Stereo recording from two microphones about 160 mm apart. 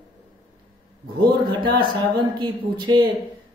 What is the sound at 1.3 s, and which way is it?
A man's voice, 25° right (ahead or behind).